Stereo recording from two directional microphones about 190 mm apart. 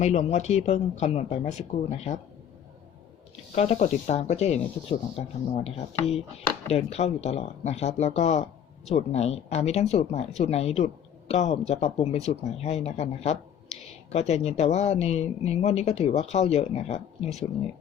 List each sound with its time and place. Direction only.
0.0 s speech: 35° left (ahead or behind)
3.5 s speech: 35° left (ahead or behind)